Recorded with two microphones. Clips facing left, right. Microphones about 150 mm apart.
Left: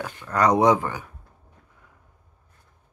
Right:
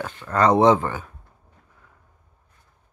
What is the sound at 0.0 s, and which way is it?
Speech, 10° left (ahead or behind).